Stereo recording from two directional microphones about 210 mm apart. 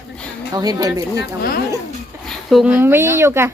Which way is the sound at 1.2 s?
45° left (ahead or behind).